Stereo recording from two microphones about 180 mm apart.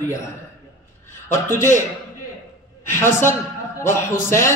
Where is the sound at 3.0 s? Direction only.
15° left (ahead or behind).